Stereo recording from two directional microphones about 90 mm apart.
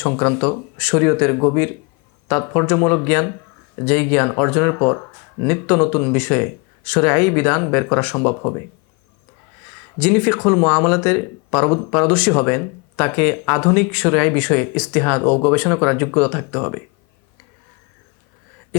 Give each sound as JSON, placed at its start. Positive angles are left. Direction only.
{"t": 0.0, "sound": "speech", "side_deg": 20}
{"t": 10.0, "sound": "speech", "side_deg": 20}